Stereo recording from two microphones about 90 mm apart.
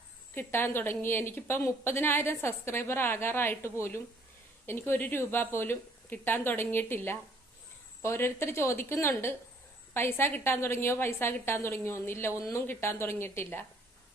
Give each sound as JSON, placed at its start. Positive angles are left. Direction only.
{"t": 0.3, "sound": "a woman's voice", "side_deg": 25}